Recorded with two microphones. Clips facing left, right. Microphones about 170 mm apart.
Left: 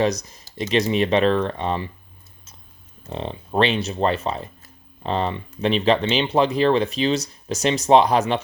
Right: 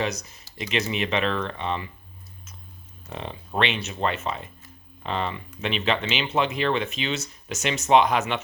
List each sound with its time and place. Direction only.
0.0 s speech: 35° left (ahead or behind)
3.1 s speech: 30° left (ahead or behind)